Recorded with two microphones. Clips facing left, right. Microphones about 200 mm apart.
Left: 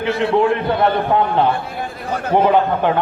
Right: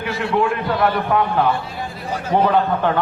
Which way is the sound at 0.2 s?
25° left (ahead or behind).